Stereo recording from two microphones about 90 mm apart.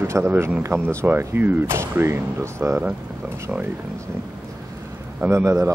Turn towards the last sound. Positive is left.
turn(degrees=-35)  # may be behind; listen again after turning